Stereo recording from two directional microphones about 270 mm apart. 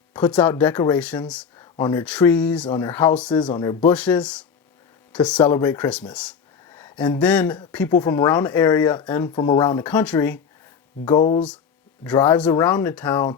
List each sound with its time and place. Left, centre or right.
0.1 s speech: centre
11.1 s speech: centre
12.0 s speech: centre